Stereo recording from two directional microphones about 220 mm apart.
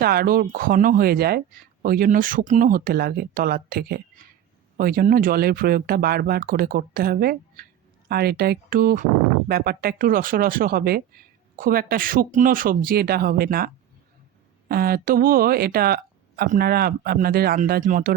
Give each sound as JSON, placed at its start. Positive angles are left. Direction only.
{"t": 0.0, "sound": "speech", "side_deg": -45}
{"t": 14.7, "sound": "speech", "side_deg": -45}